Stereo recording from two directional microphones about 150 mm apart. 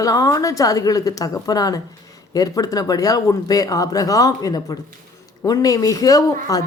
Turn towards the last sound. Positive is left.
turn(degrees=25)  # may be behind; listen again after turning